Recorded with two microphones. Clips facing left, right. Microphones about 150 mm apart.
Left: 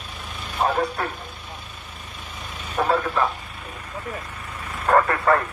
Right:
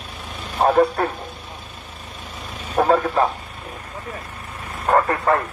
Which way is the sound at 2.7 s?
40° right (ahead or behind).